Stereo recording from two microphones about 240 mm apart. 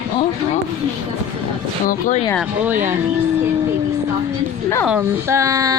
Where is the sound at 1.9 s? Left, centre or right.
Left.